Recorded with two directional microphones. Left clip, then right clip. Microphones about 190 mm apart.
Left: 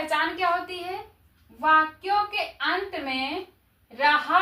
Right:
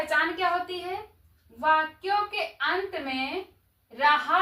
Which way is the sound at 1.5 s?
15° right (ahead or behind).